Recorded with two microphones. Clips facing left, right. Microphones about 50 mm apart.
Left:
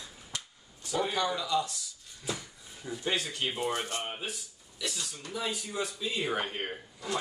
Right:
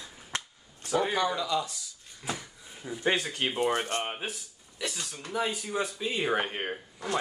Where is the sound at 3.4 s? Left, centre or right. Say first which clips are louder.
Right 4 dB; right.